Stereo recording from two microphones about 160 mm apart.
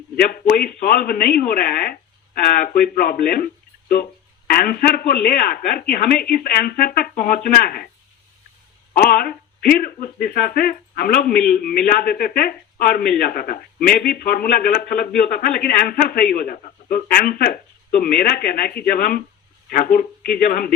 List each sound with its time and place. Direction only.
0.2 s speech: 65° left (ahead or behind)
9.0 s speech: 65° left (ahead or behind)